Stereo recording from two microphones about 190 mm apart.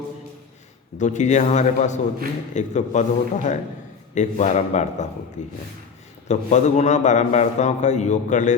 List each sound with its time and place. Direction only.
0.9 s a man's voice: 40° left (ahead or behind)